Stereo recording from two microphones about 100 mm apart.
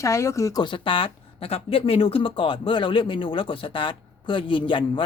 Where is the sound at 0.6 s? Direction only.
55° left (ahead or behind).